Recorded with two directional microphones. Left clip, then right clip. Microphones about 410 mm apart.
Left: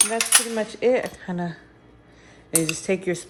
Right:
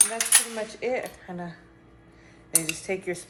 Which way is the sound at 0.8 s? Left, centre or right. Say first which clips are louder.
Left 9 dB; left.